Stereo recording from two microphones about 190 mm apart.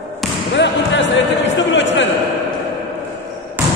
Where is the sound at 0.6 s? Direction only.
70° left (ahead or behind).